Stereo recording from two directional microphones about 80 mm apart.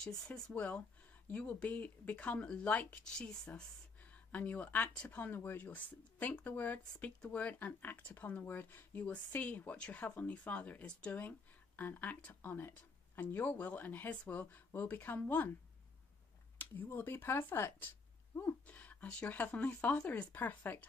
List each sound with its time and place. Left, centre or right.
0.6 s speech: centre
16.5 s speech: left